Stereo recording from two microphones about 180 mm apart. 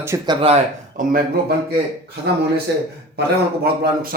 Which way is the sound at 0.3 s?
30° right (ahead or behind).